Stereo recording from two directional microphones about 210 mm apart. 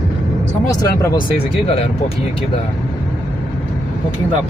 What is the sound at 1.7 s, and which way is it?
Speech, 30° left (ahead or behind).